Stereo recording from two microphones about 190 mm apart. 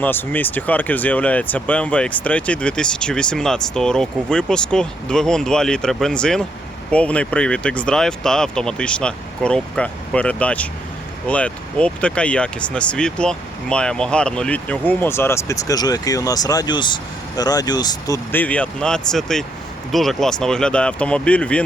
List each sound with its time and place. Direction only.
0.0 s speech: 10° left (ahead or behind)